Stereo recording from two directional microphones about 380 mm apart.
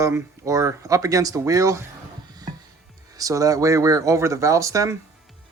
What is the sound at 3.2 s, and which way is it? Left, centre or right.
Speech, centre.